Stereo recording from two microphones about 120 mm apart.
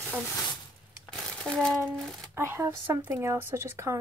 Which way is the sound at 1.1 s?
5° left (ahead or behind).